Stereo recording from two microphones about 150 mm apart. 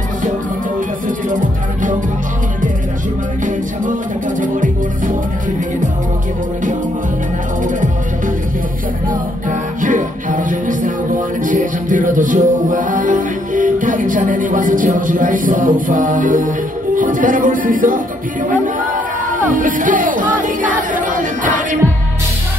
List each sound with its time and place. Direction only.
1.0 s music: 60° right (ahead or behind)
4.4 s music: 60° right (ahead or behind)
9.1 s music: 60° right (ahead or behind)
19.2 s music: 65° right (ahead or behind)